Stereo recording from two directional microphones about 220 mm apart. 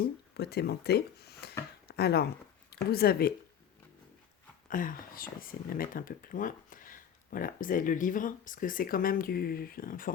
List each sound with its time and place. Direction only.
0.0 s speech: 45° left (ahead or behind)
4.7 s speech: 40° left (ahead or behind)